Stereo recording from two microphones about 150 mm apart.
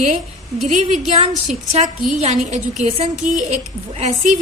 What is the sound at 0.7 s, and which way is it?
Speech, 55° right (ahead or behind).